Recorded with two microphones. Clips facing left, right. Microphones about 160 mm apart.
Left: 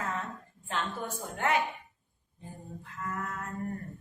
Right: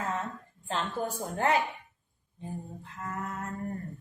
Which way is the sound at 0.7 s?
30° right (ahead or behind).